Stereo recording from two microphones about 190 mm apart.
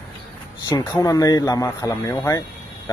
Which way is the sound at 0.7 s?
20° left (ahead or behind).